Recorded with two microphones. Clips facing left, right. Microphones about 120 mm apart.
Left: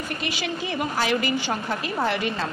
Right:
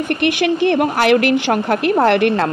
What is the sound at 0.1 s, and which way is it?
A woman's voice, 65° right (ahead or behind).